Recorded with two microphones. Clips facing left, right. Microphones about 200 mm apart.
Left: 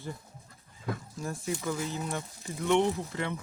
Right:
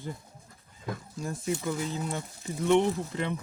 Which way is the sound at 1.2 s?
20° right (ahead or behind).